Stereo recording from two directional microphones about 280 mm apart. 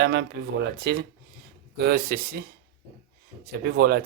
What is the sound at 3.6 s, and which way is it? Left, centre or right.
Speech, right.